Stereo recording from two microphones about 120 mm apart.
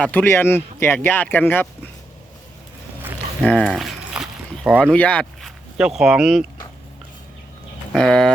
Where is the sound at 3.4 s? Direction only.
5° left (ahead or behind).